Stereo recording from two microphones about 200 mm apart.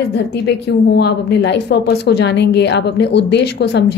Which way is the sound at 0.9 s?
55° left (ahead or behind).